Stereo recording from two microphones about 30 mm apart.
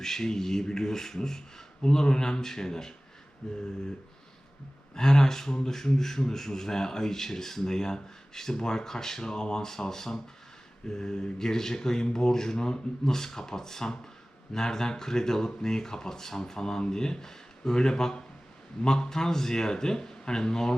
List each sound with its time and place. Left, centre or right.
0.0 s speech: centre
4.9 s speech: left